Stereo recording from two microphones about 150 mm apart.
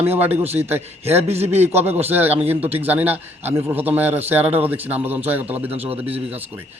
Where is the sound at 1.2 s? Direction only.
45° right (ahead or behind).